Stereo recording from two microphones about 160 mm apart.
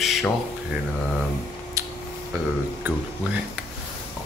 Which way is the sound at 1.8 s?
20° right (ahead or behind).